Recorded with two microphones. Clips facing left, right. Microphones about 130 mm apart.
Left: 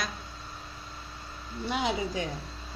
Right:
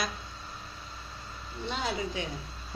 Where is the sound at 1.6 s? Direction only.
10° left (ahead or behind).